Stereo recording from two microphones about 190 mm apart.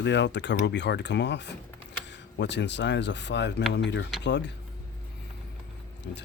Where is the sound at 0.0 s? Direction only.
65° left (ahead or behind).